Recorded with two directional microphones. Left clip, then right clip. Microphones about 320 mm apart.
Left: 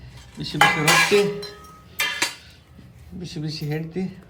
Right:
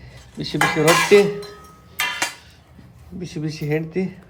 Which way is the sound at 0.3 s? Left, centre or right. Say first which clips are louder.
Right 4 dB; centre.